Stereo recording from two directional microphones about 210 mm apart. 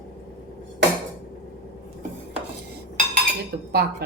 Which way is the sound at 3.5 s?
50° right (ahead or behind).